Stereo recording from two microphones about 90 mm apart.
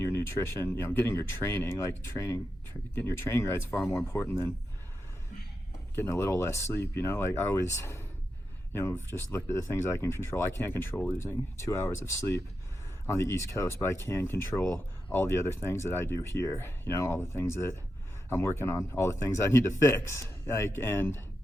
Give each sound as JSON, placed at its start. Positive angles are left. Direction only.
{"t": 0.1, "sound": "speech", "side_deg": 30}
{"t": 6.0, "sound": "speech", "side_deg": 30}